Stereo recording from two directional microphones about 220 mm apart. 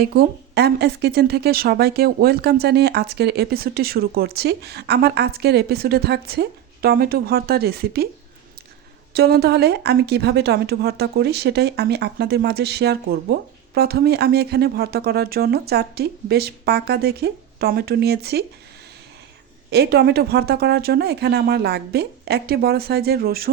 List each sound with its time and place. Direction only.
0.0 s speech: 45° right (ahead or behind)
9.1 s speech: 45° right (ahead or behind)
19.7 s speech: 45° right (ahead or behind)